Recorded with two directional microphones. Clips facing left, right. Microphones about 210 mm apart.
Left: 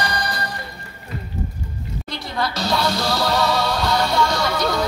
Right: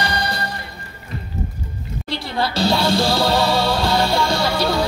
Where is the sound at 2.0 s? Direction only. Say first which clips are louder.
Right 3 dB; 30° right (ahead or behind).